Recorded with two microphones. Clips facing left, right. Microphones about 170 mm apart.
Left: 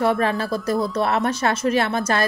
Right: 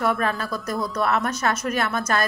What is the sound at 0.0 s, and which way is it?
A woman's voice, 30° left (ahead or behind).